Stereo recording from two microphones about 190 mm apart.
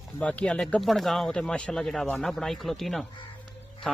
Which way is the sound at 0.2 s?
5° left (ahead or behind).